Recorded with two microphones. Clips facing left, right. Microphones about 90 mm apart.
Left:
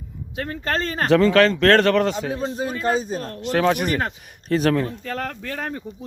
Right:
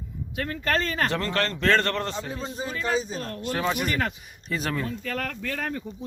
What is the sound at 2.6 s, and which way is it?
Speech, 45° left (ahead or behind).